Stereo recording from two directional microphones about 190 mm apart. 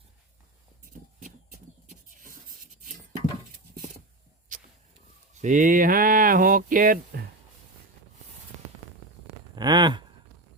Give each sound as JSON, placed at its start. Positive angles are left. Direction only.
{"t": 1.9, "sound": "writing", "side_deg": -45}
{"t": 5.3, "sound": "speech", "side_deg": -40}
{"t": 9.6, "sound": "speech", "side_deg": -25}